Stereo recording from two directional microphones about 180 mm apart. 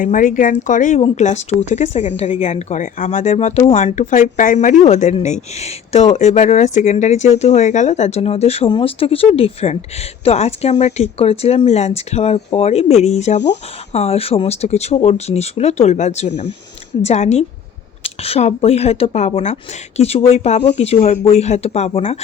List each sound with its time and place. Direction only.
0.0 s speech: 45° left (ahead or behind)